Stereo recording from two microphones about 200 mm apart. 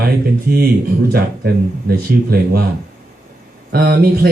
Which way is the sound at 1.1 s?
50° right (ahead or behind).